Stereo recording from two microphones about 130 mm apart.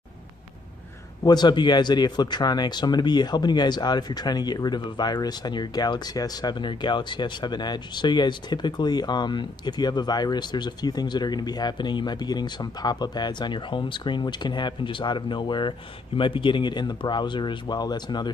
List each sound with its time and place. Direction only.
1.2 s a man's voice: 35° left (ahead or behind)